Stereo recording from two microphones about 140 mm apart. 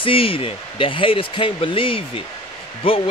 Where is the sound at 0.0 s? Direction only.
40° left (ahead or behind).